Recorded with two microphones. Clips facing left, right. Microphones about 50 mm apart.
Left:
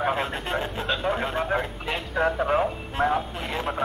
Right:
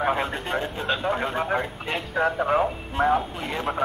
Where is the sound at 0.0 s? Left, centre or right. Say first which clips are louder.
Right 1 dB; centre.